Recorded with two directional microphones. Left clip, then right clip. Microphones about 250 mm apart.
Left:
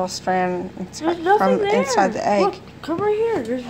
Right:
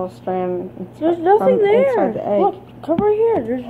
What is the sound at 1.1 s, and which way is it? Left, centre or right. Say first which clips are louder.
Speech: right 3 dB; centre.